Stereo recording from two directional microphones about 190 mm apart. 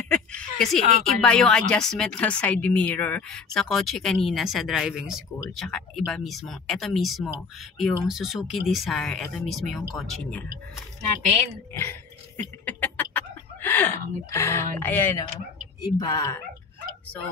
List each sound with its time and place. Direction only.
0.1 s a woman's voice: 5° left (ahead or behind)
12.6 s speech: 10° left (ahead or behind)